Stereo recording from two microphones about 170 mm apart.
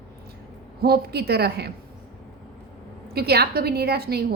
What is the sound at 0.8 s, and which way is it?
Speech, 70° right (ahead or behind).